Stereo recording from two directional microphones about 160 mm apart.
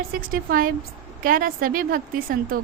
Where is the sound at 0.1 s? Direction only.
60° right (ahead or behind).